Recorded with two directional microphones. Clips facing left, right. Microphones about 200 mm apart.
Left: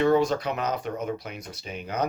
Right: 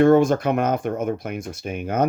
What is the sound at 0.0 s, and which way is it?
Speech, 50° right (ahead or behind).